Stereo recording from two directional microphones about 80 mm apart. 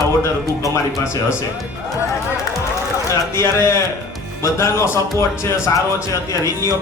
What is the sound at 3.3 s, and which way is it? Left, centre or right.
Speech, left.